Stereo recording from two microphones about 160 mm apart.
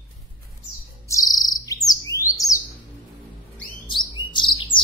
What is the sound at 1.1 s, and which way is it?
Bird, 20° left (ahead or behind).